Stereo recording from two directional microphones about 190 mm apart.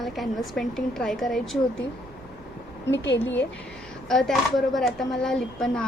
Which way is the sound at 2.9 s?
65° left (ahead or behind).